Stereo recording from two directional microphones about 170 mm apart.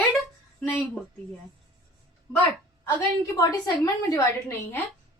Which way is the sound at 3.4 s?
20° left (ahead or behind).